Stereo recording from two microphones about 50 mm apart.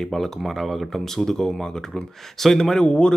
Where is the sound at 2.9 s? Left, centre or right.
Left.